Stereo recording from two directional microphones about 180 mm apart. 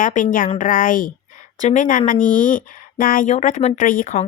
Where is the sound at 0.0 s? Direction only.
45° left (ahead or behind).